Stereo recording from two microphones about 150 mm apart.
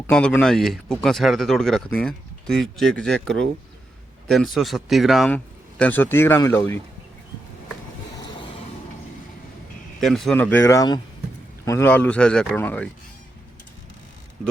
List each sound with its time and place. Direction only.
0.1 s speech: 5° left (ahead or behind)
5.8 s a man's voice: 15° left (ahead or behind)
10.0 s speech: centre (ahead or behind)
10.3 s a man's voice: 10° left (ahead or behind)